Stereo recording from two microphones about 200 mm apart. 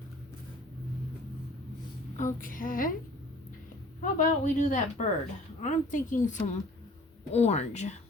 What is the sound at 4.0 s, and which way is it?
Speech, 40° left (ahead or behind).